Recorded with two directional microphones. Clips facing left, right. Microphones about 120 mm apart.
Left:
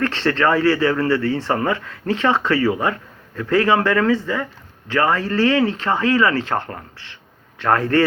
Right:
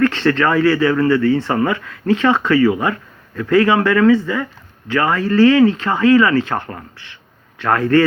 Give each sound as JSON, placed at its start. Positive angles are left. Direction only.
{"t": 0.0, "sound": "speech", "side_deg": 30}